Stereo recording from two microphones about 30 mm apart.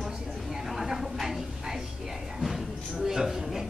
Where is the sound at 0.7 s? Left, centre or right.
Centre.